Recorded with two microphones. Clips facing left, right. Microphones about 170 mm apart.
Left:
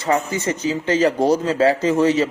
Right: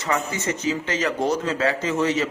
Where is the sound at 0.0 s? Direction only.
30° left (ahead or behind).